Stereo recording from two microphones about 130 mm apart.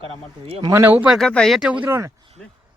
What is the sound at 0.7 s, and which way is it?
Speech, 15° right (ahead or behind).